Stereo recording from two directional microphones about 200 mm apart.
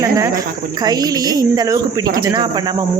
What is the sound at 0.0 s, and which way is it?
Speech, 15° right (ahead or behind).